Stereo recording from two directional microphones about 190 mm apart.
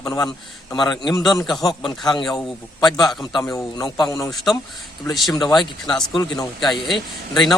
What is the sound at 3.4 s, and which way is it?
Speech, 15° left (ahead or behind).